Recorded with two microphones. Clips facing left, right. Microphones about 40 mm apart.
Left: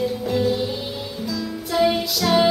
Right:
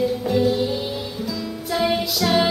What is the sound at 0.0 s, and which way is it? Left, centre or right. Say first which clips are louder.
Music: right 2 dB; centre.